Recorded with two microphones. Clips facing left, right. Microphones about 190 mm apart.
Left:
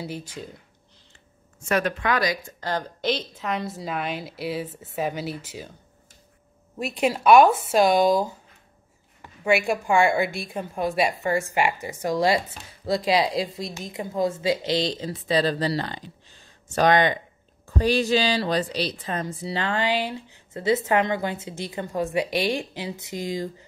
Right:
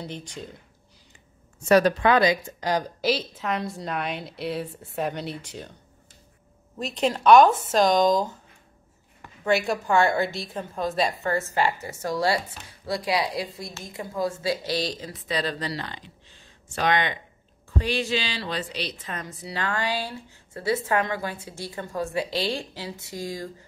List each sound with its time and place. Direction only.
0.0 s a woman's voice: 5° left (ahead or behind)
1.7 s speech: 35° right (ahead or behind)
2.6 s a woman's voice: 10° right (ahead or behind)
6.8 s a woman's voice: 10° left (ahead or behind)
9.4 s a woman's voice: 10° left (ahead or behind)